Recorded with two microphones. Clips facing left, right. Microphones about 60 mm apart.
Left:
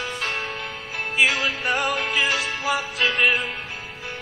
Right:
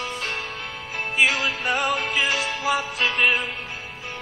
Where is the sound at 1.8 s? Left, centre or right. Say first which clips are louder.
Even; right.